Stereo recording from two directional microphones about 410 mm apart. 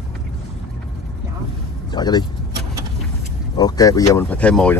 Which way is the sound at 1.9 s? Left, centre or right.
Centre.